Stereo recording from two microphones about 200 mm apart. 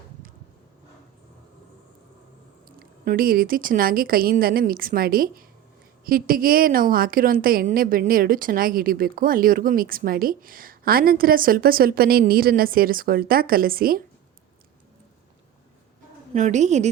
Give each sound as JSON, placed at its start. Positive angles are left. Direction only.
{"t": 2.6, "sound": "a woman's voice", "side_deg": -45}
{"t": 16.3, "sound": "a woman's voice", "side_deg": -35}